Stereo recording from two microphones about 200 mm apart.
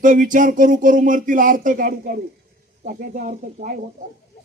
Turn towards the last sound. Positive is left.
turn(degrees=-40)  # may be behind; listen again after turning